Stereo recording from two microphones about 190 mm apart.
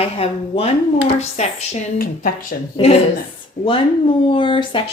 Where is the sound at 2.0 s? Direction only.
50° left (ahead or behind).